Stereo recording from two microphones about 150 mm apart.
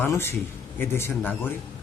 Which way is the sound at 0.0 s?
15° left (ahead or behind).